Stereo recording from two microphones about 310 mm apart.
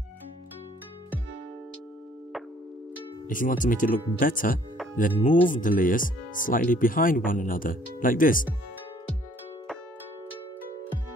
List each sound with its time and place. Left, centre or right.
3.3 s speech: left